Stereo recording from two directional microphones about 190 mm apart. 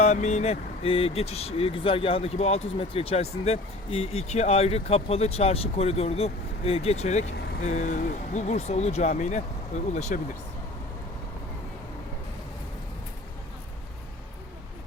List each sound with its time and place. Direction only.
0.0 s speech: 35° left (ahead or behind)